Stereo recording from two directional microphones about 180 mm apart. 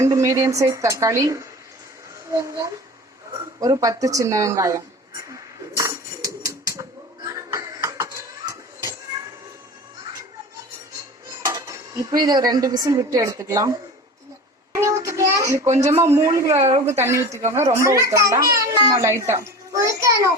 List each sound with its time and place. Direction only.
0.0 s a child's voice: 15° right (ahead or behind)
3.6 s a sound: 20° right (ahead or behind)
7.3 s music: 15° right (ahead or behind)
11.4 s speech: 15° right (ahead or behind)
14.8 s a child's voice: 15° right (ahead or behind)
15.6 s a woman's voice: 40° right (ahead or behind)
15.9 s a child's voice: 15° right (ahead or behind)
16.2 s a woman's voice: 35° right (ahead or behind)
17.0 s a child's voice: 15° right (ahead or behind)